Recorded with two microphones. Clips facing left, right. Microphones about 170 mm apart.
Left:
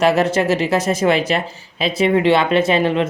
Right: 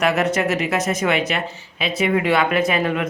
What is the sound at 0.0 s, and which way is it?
Speech, 30° left (ahead or behind).